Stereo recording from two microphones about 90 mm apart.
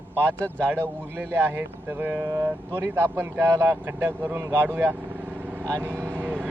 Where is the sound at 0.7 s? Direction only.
25° right (ahead or behind).